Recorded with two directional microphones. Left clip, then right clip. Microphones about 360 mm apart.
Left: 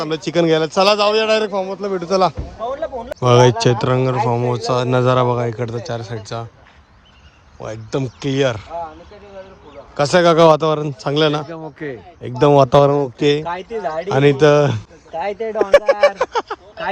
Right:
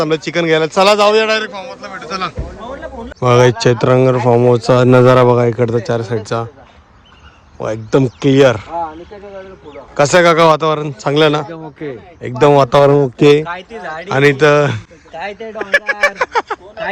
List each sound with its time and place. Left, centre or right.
0.0 s a man's voice: centre
3.2 s a man's voice: centre
7.6 s speech: centre
9.9 s a man's voice: centre
13.4 s speech: left
14.1 s a man's voice: centre
15.2 s a man's voice: left; by 16.9 s centre